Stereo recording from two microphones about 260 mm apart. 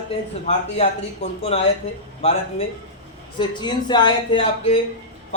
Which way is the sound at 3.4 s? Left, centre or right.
Centre.